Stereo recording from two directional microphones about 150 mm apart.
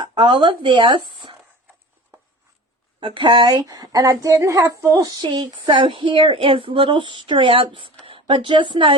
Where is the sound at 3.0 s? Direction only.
35° right (ahead or behind).